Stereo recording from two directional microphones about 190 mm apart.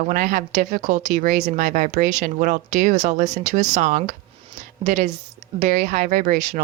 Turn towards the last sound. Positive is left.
turn(degrees=-40)  # may be behind; listen again after turning